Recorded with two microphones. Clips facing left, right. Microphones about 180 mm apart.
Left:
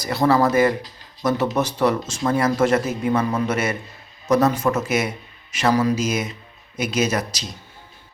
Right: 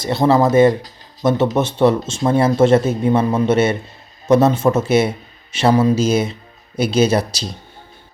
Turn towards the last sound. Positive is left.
turn(degrees=-30)  # may be behind; listen again after turning